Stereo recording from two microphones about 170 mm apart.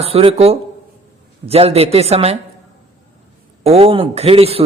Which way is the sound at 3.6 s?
35° right (ahead or behind).